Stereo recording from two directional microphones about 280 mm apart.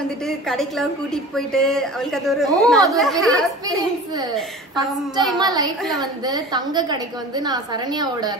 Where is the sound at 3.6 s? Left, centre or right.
Centre.